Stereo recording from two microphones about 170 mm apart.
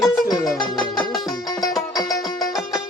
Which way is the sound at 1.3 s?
20° left (ahead or behind).